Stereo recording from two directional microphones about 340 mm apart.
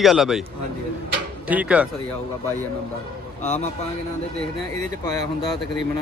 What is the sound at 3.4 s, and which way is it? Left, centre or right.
Speech, left.